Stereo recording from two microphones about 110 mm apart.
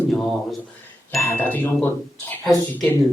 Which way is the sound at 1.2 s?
20° left (ahead or behind).